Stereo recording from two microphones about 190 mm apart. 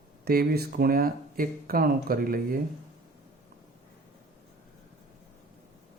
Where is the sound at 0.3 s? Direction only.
55° right (ahead or behind).